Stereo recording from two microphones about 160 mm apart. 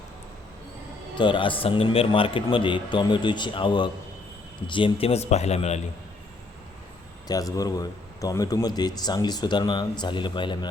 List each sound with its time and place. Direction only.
1.1 s a man's voice: 30° left (ahead or behind)
7.3 s a man's voice: 20° left (ahead or behind)